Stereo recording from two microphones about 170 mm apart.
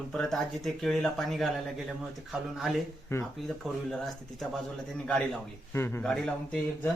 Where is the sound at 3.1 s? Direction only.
15° left (ahead or behind).